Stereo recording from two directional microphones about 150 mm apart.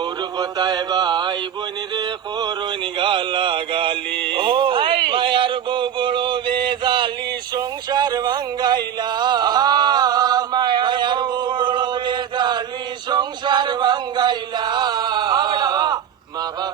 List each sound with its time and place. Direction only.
0.0 s music: 30° right (ahead or behind)
3.0 s music: 35° right (ahead or behind)
4.2 s a sound: 35° right (ahead or behind)
13.1 s male singing: 30° right (ahead or behind)